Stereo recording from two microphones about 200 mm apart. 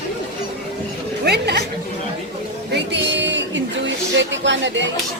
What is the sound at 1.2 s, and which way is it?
Speech, 55° right (ahead or behind).